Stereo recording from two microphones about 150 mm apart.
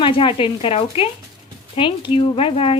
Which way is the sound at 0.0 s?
35° left (ahead or behind).